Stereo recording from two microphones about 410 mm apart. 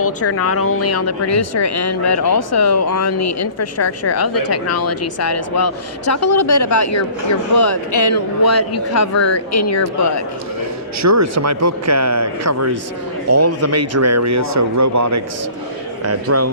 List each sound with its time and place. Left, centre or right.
0.0 s speech: left
11.0 s speech: right